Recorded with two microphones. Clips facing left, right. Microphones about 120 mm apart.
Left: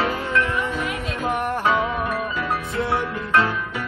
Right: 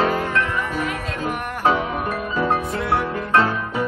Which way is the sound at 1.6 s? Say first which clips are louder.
Right 4 dB; 35° right (ahead or behind).